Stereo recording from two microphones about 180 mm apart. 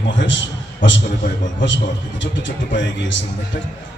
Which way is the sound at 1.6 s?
90° left.